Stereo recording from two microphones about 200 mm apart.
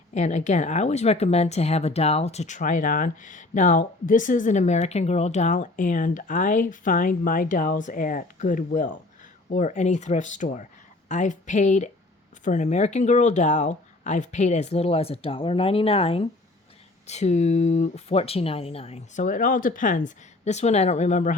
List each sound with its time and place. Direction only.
0.1 s speech: 35° left (ahead or behind)